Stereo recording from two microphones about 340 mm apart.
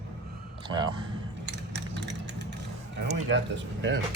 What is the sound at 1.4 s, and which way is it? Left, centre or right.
Vehicle, right.